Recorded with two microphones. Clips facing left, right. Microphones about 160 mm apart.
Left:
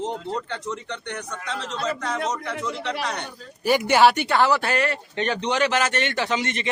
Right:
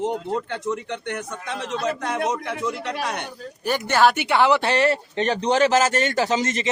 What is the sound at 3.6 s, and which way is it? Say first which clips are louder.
Speech: left 2 dB; 10° left (ahead or behind).